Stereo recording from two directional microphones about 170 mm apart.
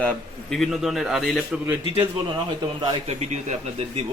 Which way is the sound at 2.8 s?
40° right (ahead or behind).